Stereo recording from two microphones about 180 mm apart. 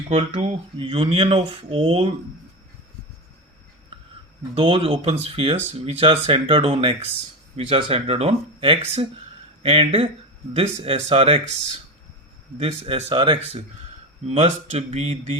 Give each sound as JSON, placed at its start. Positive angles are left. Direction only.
{"t": 0.1, "sound": "speech", "side_deg": -35}
{"t": 4.5, "sound": "speech", "side_deg": -30}
{"t": 12.5, "sound": "speech", "side_deg": -35}